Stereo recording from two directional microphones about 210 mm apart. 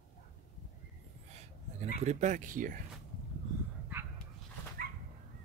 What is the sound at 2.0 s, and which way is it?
Speech, 35° right (ahead or behind).